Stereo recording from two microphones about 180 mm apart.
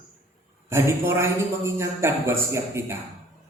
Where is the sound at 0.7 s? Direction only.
15° right (ahead or behind).